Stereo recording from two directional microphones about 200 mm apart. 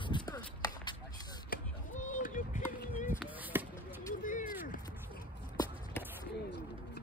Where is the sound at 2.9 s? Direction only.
10° right (ahead or behind).